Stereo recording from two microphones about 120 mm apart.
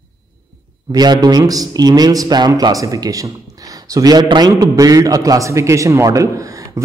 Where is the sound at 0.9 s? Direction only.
35° right (ahead or behind).